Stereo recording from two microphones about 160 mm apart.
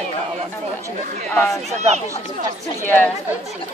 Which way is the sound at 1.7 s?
45° right (ahead or behind).